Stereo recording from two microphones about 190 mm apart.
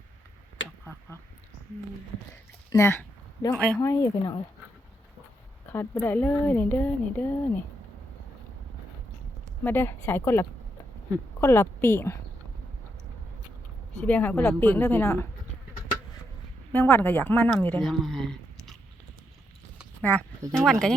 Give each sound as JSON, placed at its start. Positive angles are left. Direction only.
{"t": 2.3, "sound": "speech", "side_deg": 15}
{"t": 5.7, "sound": "speech", "side_deg": 10}
{"t": 9.6, "sound": "speech", "side_deg": 10}
{"t": 14.0, "sound": "speech", "side_deg": 10}
{"t": 16.7, "sound": "speech", "side_deg": 10}
{"t": 20.0, "sound": "speech", "side_deg": 5}